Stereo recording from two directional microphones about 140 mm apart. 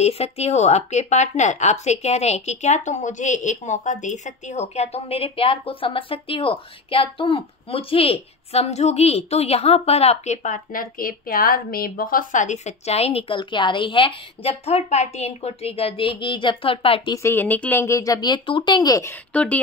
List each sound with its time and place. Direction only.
0.0 s speech: 50° left (ahead or behind)
13.4 s a woman's voice: 35° left (ahead or behind)
17.1 s speech: 20° left (ahead or behind)
19.3 s speech: 10° left (ahead or behind)